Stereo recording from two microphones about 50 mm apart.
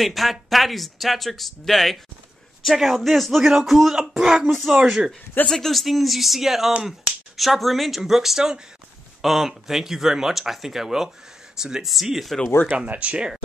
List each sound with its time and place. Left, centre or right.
0.0 s speech: centre
4.5 s speech: centre
5.5 s speech: centre
12.6 s speech: right